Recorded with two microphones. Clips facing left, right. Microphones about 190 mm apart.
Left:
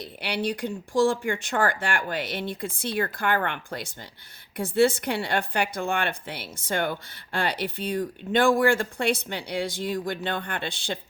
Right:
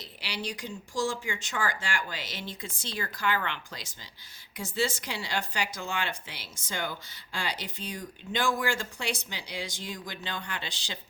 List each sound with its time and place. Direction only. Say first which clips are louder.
0.0 s speech: left 9 dB; 60° left (ahead or behind)